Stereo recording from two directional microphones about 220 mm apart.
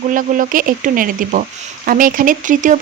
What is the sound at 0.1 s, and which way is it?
Speech, 35° right (ahead or behind).